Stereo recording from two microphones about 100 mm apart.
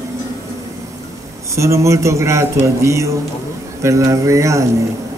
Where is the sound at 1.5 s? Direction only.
30° right (ahead or behind).